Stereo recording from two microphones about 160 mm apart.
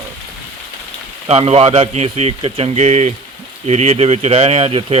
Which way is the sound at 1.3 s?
40° right (ahead or behind).